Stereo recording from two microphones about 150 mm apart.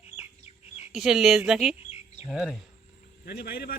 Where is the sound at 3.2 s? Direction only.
90° left.